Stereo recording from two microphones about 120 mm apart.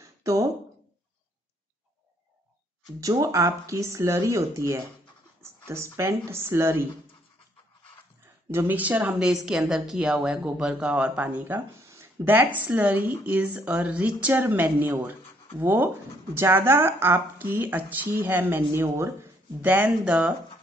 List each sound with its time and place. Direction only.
0.0 s a sound: 30° right (ahead or behind)
3.0 s speech: 30° right (ahead or behind)
5.4 s a sound: 20° right (ahead or behind)
5.9 s speech: 25° right (ahead or behind)
8.5 s a woman's voice: 15° right (ahead or behind)
9.3 s a woman's voice: centre (ahead or behind)